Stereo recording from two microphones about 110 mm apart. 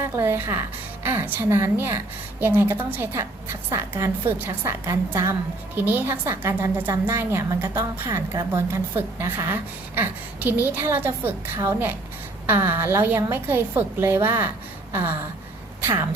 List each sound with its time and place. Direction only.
0.0 s a woman's voice: 20° right (ahead or behind)